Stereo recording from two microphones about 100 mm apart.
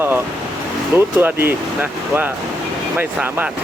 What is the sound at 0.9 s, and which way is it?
Speech, 20° right (ahead or behind).